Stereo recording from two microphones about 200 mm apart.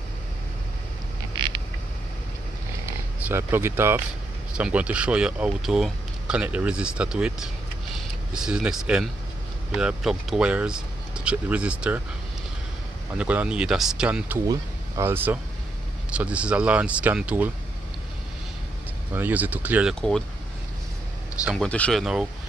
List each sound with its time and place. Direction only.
1.3 s a sound: 25° right (ahead or behind)
3.3 s speech: 10° right (ahead or behind)
13.2 s speech: 5° right (ahead or behind)
19.1 s speech: 10° right (ahead or behind)
21.5 s speech: 5° left (ahead or behind)